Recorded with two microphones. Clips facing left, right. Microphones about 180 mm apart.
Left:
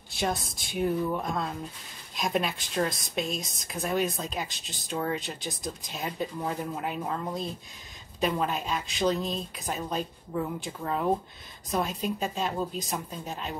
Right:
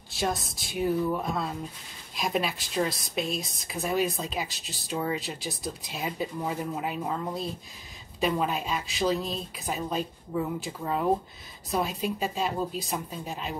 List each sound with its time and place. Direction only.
0.1 s speech: centre (ahead or behind)